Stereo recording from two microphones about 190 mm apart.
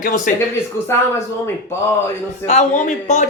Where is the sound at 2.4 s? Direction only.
40° left (ahead or behind).